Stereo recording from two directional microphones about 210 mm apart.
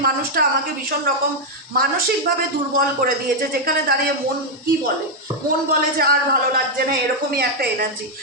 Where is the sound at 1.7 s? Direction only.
45° right (ahead or behind).